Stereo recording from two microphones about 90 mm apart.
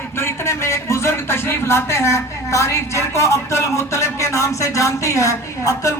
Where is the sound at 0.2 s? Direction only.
30° left (ahead or behind).